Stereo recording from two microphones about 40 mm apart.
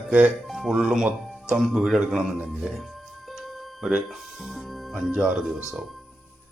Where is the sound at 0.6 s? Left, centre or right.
Centre.